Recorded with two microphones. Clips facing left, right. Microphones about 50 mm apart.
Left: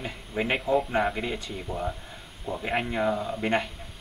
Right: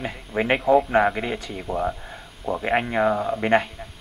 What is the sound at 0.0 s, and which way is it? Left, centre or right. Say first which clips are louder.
Speech: right 5 dB; right.